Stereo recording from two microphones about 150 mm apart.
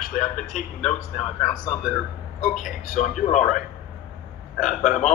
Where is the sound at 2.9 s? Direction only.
55° left (ahead or behind).